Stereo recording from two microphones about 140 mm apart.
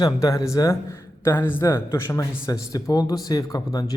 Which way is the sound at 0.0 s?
25° left (ahead or behind).